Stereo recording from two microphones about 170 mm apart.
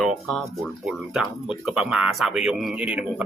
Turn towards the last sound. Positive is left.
turn(degrees=-10)  # may be behind; listen again after turning